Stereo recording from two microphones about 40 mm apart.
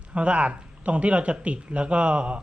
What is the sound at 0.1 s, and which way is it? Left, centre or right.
Speech, right.